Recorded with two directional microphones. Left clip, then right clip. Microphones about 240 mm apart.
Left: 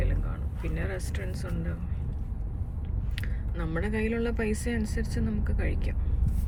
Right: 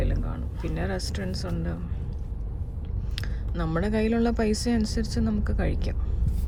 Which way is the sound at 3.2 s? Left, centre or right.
Centre.